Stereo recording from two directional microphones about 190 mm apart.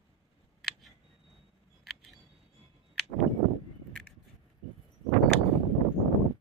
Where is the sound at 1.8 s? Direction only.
Centre (ahead or behind).